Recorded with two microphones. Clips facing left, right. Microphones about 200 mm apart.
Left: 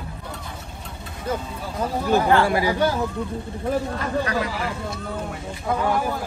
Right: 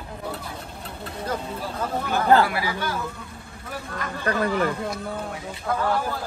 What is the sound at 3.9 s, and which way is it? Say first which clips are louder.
Speech: left 2 dB; 55° right (ahead or behind).